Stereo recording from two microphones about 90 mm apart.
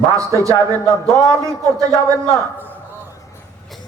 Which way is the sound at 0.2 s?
35° right (ahead or behind).